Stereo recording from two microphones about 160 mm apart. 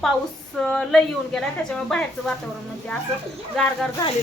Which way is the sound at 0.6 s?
5° left (ahead or behind).